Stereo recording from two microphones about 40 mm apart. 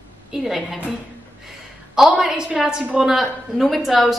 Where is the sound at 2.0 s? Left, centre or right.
Centre.